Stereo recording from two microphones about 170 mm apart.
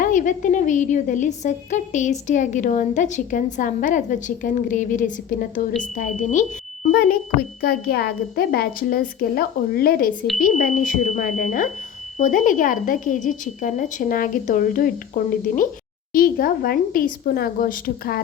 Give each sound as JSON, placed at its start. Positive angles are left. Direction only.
{"t": 0.0, "sound": "a woman's voice", "side_deg": 50}
{"t": 6.9, "sound": "a woman's voice", "side_deg": 65}